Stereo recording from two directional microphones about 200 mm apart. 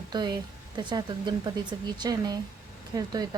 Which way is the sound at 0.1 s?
20° right (ahead or behind).